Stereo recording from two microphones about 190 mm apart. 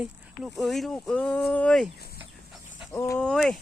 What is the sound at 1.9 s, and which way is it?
Speech, 55° left (ahead or behind).